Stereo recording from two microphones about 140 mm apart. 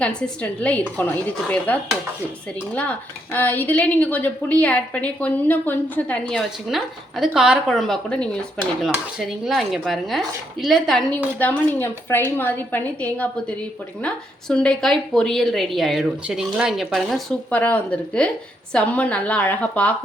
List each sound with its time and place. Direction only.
0.0 s a woman's voice: 10° left (ahead or behind)
3.3 s a woman's voice: 15° left (ahead or behind)
11.3 s a woman's voice: 15° left (ahead or behind)